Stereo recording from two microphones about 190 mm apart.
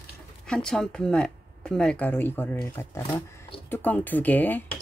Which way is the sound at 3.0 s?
25° left (ahead or behind).